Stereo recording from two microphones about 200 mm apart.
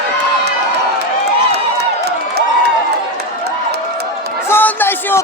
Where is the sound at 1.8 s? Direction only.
55° right (ahead or behind).